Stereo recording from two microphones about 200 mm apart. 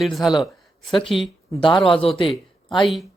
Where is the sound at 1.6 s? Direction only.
25° left (ahead or behind).